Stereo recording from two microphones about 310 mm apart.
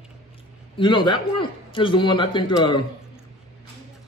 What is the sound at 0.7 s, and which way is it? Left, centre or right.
A man's voice, centre.